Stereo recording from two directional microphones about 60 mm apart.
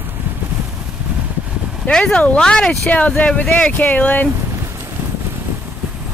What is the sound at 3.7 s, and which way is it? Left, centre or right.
Speech, left.